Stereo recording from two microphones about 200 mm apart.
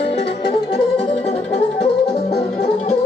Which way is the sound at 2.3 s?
30° left (ahead or behind).